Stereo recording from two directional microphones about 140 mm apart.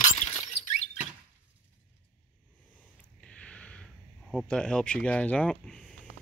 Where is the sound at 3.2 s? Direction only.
10° left (ahead or behind).